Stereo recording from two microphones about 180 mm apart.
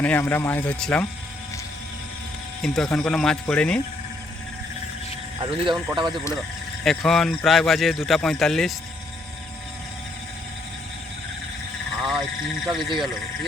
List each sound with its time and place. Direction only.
0.0 s speech: 10° left (ahead or behind)
2.6 s speech: centre (ahead or behind)
5.4 s speech: 25° right (ahead or behind)
6.8 s speech: centre (ahead or behind)
12.6 s speech: centre (ahead or behind)